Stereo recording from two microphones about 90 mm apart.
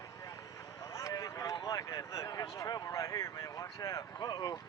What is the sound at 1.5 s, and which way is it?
Speech, 45° left (ahead or behind).